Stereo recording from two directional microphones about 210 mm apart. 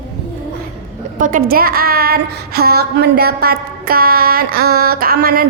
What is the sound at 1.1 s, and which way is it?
Speech, 40° right (ahead or behind).